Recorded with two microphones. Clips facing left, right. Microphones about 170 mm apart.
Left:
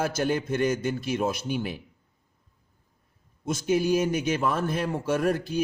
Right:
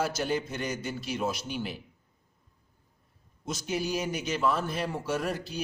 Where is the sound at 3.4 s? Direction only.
50° left (ahead or behind).